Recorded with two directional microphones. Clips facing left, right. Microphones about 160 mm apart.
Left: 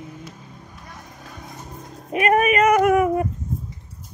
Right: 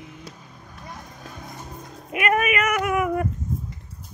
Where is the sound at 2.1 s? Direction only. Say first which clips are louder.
Left 4 dB; 35° left (ahead or behind).